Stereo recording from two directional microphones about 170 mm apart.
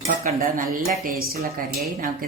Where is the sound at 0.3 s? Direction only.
60° right (ahead or behind).